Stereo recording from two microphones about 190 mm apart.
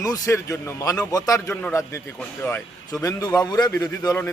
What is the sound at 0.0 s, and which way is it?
A man's voice, 15° left (ahead or behind).